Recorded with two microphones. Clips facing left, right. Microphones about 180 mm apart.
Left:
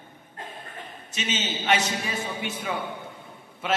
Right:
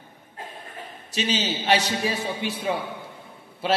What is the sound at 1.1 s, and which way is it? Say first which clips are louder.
A man's voice: right 5 dB; 35° right (ahead or behind).